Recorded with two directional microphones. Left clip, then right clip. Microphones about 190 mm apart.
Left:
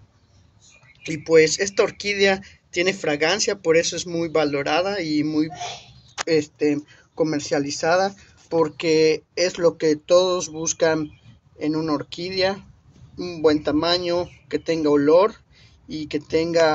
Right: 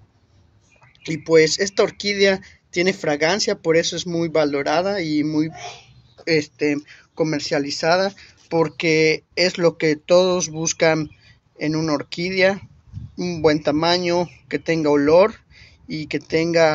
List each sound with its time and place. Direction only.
1.0 s speech: 20° right (ahead or behind)